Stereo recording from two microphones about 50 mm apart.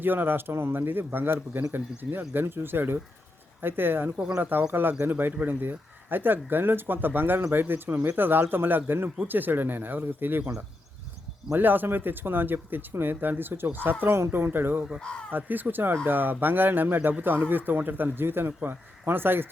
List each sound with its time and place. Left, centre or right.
0.0 s a man's voice: right
11.5 s a man's voice: right
14.0 s a man's voice: right